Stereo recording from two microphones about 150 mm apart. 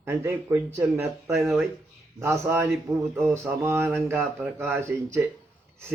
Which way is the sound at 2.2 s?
20° right (ahead or behind).